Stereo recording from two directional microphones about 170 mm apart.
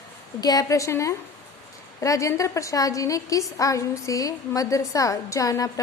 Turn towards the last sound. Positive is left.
turn(degrees=20)  # may be behind; listen again after turning